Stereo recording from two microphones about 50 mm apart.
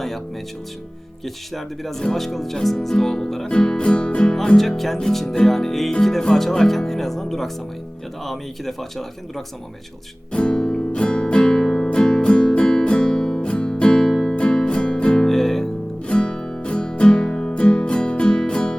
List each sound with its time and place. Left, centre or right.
1.2 s speech: centre
10.3 s music: centre
16.0 s music: centre